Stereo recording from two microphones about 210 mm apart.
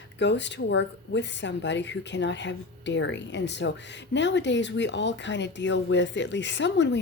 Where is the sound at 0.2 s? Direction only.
55° left (ahead or behind).